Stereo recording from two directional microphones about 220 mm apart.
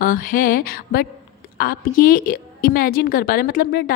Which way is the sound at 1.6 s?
40° left (ahead or behind).